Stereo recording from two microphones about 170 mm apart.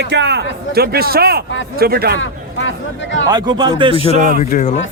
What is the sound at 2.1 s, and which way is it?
Speech, 90° left.